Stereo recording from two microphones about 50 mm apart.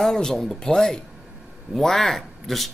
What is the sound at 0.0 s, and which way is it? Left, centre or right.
Speech, centre.